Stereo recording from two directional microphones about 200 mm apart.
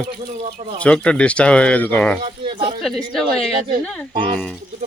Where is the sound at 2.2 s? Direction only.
25° right (ahead or behind).